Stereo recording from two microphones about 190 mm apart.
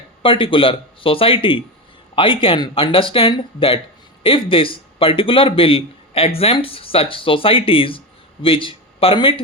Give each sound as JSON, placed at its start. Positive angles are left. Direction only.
{"t": 0.2, "sound": "speech", "side_deg": 25}